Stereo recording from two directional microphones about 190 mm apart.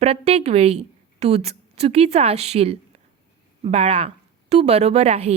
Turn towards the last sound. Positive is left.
turn(degrees=-35)  # may be behind; listen again after turning